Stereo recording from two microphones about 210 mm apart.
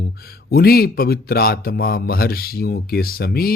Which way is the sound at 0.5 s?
45° left (ahead or behind).